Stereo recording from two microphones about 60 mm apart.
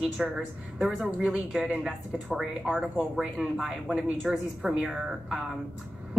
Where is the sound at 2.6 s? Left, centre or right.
Centre.